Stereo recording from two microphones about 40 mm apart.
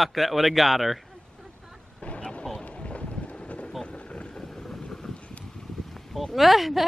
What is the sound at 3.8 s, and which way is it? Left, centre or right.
Boat, left.